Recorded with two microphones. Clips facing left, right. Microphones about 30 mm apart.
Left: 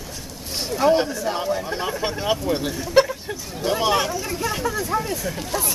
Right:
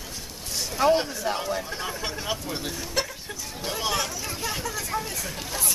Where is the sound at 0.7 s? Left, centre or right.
Centre; by 4.2 s left.